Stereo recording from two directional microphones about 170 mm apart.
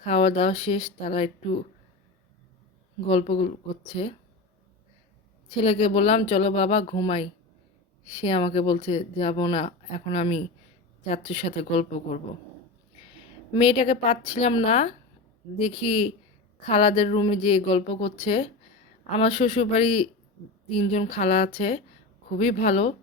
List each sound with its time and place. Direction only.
0.0 s speech: 35° left (ahead or behind)
3.1 s speech: 40° left (ahead or behind)
5.6 s speech: 35° left (ahead or behind)
13.5 s speech: 35° left (ahead or behind)